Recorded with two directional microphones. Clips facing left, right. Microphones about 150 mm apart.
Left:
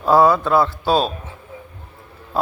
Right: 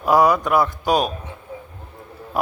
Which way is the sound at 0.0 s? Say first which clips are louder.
Left 2 dB; 15° right (ahead or behind).